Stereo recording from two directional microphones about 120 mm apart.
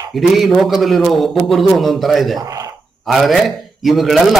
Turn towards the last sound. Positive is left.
turn(degrees=0)  # may be behind; listen again after turning